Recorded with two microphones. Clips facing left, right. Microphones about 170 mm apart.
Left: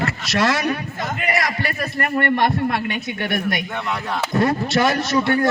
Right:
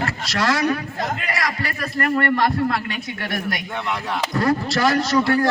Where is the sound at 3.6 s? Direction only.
Centre (ahead or behind).